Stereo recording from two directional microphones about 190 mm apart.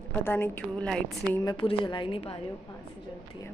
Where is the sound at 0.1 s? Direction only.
10° left (ahead or behind).